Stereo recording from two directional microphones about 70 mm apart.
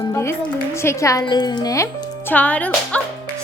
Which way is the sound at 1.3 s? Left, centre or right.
Left.